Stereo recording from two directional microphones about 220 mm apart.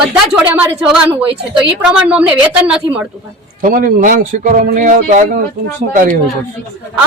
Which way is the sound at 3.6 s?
40° right (ahead or behind).